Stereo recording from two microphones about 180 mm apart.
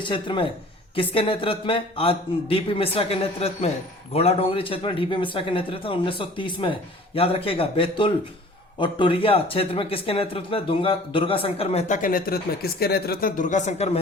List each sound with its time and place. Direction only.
0.0 s speech: 25° left (ahead or behind)